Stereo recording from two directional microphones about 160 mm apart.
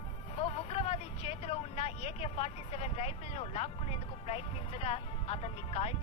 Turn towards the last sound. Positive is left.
turn(degrees=40)  # may be behind; listen again after turning